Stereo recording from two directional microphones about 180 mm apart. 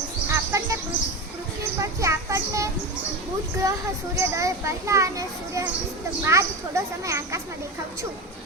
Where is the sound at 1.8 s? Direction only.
15° right (ahead or behind).